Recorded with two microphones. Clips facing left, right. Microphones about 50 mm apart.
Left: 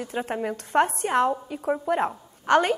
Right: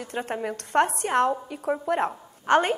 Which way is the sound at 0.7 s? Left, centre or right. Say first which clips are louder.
Even; centre.